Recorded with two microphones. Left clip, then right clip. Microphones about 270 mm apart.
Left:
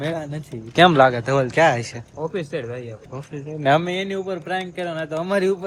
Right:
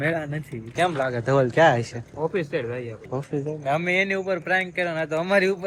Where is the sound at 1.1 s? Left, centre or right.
Centre.